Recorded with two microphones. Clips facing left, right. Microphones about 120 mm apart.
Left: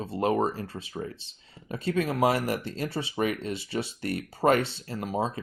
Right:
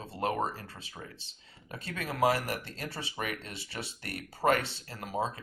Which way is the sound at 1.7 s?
25° left (ahead or behind).